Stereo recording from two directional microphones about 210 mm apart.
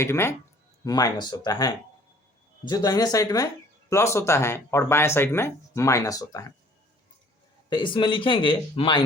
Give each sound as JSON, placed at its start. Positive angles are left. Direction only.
{"t": 0.0, "sound": "speech", "side_deg": 10}
{"t": 7.7, "sound": "speech", "side_deg": 20}